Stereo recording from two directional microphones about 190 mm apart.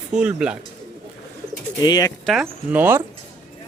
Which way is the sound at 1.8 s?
20° left (ahead or behind).